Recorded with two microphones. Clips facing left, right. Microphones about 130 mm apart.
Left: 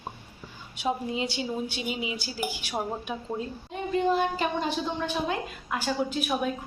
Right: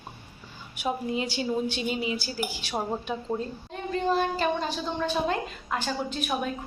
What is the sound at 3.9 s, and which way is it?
A woman's voice, 15° left (ahead or behind).